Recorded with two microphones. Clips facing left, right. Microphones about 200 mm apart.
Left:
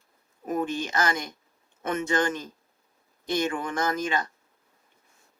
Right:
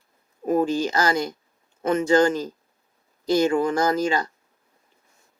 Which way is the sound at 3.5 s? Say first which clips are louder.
Right 8 dB; 30° right (ahead or behind).